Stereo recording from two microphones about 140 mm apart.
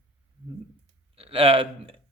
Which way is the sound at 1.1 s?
40° right (ahead or behind).